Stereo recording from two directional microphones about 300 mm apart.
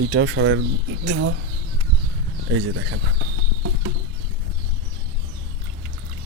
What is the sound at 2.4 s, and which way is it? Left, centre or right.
Speech, right.